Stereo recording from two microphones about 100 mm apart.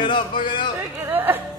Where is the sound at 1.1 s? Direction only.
20° right (ahead or behind).